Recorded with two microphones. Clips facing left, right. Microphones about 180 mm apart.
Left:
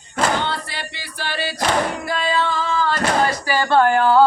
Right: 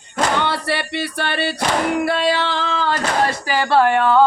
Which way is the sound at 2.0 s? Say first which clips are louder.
Right 3 dB; 70° right (ahead or behind).